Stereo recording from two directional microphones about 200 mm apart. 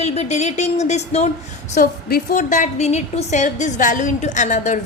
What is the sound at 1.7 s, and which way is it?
A woman's voice, 45° left (ahead or behind).